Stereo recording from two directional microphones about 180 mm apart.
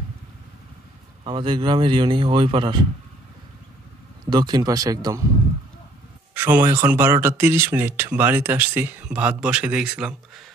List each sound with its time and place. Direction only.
1.2 s speech: 25° right (ahead or behind)
4.3 s speech: 25° right (ahead or behind)
6.3 s speech: 10° right (ahead or behind)